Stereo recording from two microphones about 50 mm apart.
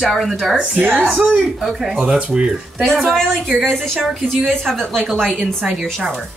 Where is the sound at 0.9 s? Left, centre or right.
Right.